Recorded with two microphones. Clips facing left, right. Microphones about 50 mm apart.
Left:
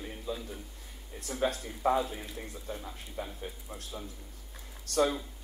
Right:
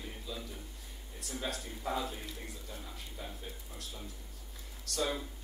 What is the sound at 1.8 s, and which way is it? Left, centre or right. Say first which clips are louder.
Speech: left 9 dB; left.